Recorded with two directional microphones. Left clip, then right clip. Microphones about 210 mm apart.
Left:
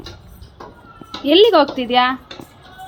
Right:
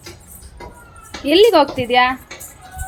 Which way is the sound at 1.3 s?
10° right (ahead or behind).